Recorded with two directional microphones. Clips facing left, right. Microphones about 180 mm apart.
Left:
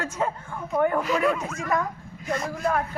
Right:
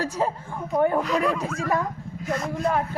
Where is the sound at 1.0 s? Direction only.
5° left (ahead or behind).